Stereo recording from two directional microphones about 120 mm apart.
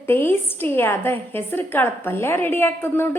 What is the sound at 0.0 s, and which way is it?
A woman's voice, 20° left (ahead or behind).